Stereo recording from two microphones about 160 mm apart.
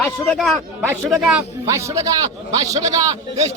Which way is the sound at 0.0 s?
Centre (ahead or behind).